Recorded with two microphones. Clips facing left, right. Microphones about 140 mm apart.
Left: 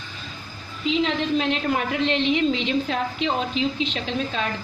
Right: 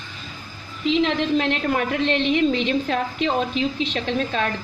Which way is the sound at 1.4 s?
50° right (ahead or behind).